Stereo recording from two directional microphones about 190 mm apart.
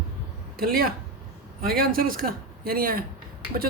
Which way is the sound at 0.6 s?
50° right (ahead or behind).